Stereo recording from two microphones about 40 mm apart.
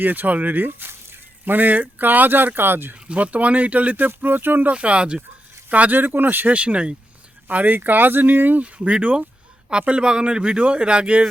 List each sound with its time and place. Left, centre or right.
0.0 s speech: right
3.1 s speech: right
4.7 s speech: right
5.7 s speech: right
6.0 s speech: right
6.5 s speech: right
7.4 s speech: right
8.6 s speech: right